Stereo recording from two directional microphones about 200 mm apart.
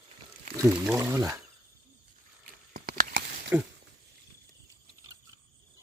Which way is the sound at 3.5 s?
10° right (ahead or behind).